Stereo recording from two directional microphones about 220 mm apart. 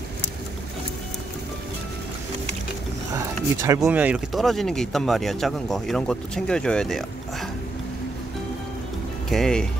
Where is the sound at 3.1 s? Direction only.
15° right (ahead or behind); by 7.5 s centre (ahead or behind).